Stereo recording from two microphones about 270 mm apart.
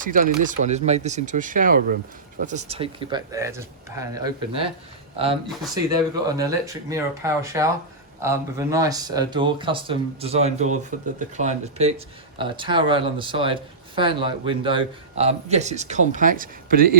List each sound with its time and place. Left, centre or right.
0.0 s speech: right